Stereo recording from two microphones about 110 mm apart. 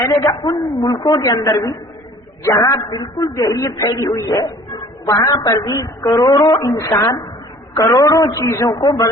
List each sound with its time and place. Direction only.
0.0 s a woman's voice: 35° left (ahead or behind)